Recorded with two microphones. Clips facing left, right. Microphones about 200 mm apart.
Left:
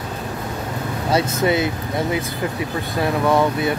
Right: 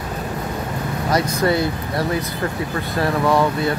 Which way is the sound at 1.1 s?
20° left (ahead or behind).